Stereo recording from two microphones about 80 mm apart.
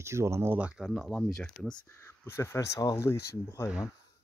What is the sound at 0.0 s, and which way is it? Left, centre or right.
Speech, right.